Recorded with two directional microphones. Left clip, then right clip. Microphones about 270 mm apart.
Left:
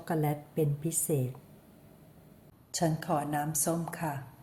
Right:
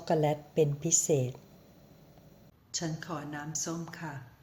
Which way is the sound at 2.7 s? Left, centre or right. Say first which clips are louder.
Left 7 dB; centre.